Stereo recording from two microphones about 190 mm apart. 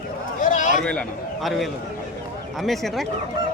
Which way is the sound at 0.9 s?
5° left (ahead or behind).